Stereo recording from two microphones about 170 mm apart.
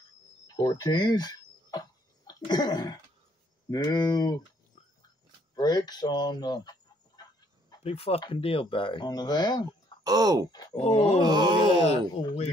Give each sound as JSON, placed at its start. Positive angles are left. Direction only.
{"t": 0.6, "sound": "a sound", "side_deg": 25}
{"t": 3.7, "sound": "speech", "side_deg": 25}
{"t": 5.6, "sound": "speech", "side_deg": 25}
{"t": 7.7, "sound": "speech", "side_deg": 35}
{"t": 10.0, "sound": "wail", "side_deg": -25}
{"t": 10.8, "sound": "speech", "side_deg": 35}
{"t": 11.2, "sound": "wail", "side_deg": -25}
{"t": 11.8, "sound": "speech", "side_deg": 35}